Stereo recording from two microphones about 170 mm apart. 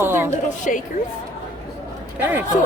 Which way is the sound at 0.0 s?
15° right (ahead or behind).